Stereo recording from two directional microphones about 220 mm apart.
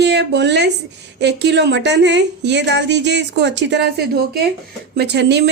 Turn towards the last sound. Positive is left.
turn(degrees=-50)  # may be behind; listen again after turning